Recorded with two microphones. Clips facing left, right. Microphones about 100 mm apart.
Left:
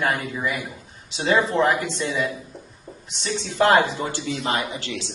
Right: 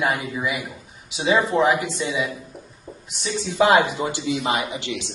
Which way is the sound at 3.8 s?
15° right (ahead or behind).